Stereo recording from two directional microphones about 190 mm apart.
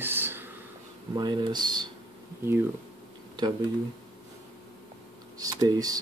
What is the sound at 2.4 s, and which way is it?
Speech, 10° right (ahead or behind).